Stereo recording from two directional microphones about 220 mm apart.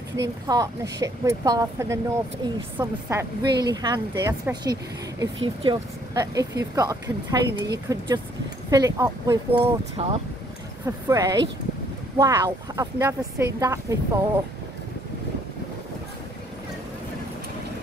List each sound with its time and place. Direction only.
0.2 s speech: 15° right (ahead or behind)